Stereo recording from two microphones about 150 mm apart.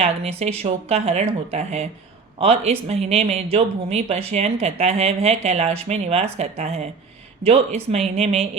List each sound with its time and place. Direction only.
0.0 s speech: 45° right (ahead or behind)